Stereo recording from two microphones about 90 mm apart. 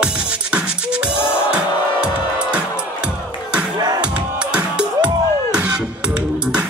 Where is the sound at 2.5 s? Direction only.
10° right (ahead or behind).